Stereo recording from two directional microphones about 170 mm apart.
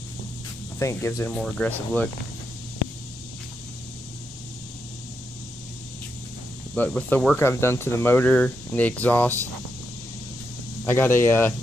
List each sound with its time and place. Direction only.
0.7 s speech: 15° left (ahead or behind)
1.3 s speech: 5° left (ahead or behind)
6.7 s speech: 5° left (ahead or behind)
10.9 s speech: 15° left (ahead or behind)